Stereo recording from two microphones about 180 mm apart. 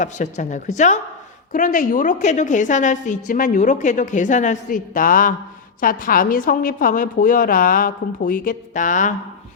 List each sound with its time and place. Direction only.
0.0 s a woman's voice: 40° left (ahead or behind)